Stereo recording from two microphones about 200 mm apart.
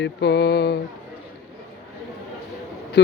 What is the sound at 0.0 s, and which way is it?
Mantra, 60° left (ahead or behind).